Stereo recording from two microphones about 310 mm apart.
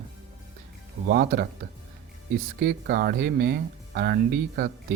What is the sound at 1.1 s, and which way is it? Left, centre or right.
Speech, right.